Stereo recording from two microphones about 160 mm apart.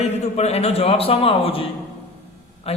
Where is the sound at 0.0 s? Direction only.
40° left (ahead or behind).